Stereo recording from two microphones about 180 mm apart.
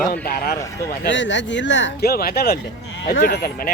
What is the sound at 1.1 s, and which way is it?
Speech, 90° left.